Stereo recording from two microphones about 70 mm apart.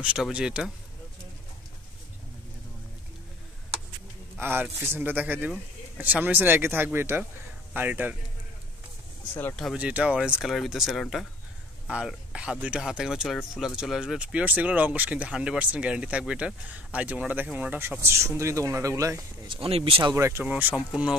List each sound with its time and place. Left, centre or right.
0.0 s speech: centre
4.4 s speech: right
9.8 s speech: centre
10.4 s speech: centre
11.9 s speech: centre
18.0 s speech: right
20.4 s speech: right
20.7 s speech: centre